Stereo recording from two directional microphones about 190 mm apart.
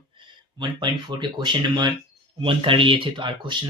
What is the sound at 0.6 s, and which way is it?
Speech, 25° right (ahead or behind).